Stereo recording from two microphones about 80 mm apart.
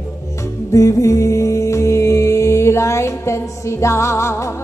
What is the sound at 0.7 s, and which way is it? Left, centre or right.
Music, left.